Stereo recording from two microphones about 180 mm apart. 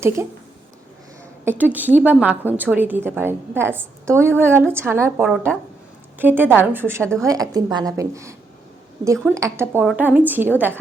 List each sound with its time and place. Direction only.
1.5 s a woman's voice: 10° right (ahead or behind)
9.8 s a woman's voice: 5° right (ahead or behind)